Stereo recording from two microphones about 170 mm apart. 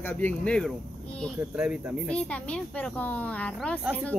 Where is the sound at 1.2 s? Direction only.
5° right (ahead or behind).